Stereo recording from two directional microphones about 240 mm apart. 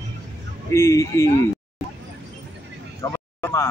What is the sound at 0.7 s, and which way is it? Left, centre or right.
Speech, centre.